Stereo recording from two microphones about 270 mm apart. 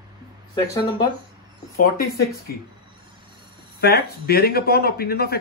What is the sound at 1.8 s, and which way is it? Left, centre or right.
Speech, left.